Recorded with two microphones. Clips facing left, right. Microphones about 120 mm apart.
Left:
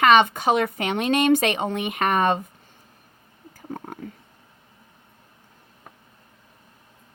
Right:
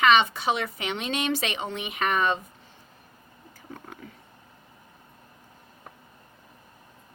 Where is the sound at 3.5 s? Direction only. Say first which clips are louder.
Left 8 dB; 45° left (ahead or behind).